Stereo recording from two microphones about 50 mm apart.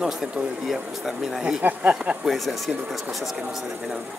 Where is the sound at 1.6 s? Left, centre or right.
Right.